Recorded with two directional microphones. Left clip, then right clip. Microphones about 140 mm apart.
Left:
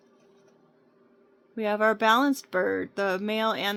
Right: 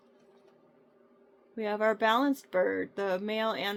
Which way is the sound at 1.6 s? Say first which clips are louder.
Left 4 dB; 90° left.